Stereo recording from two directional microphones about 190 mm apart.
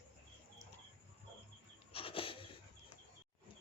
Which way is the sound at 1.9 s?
30° left (ahead or behind).